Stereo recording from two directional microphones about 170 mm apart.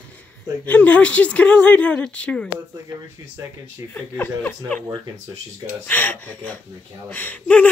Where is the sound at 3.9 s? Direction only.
10° left (ahead or behind).